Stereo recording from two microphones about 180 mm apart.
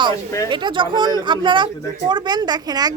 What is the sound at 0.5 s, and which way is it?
Speech, 25° right (ahead or behind).